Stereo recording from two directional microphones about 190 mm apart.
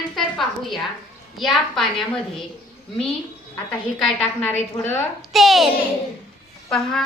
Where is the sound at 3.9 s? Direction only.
Centre (ahead or behind).